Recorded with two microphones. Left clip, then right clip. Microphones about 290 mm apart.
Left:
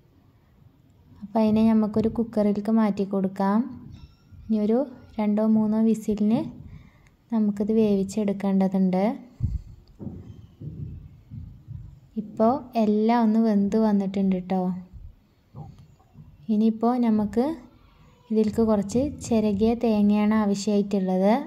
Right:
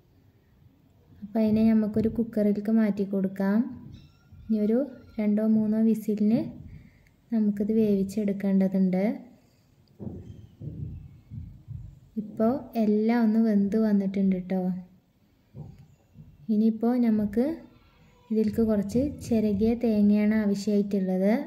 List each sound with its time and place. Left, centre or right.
1.3 s a woman's voice: centre
12.4 s a woman's voice: centre
16.4 s a woman's voice: centre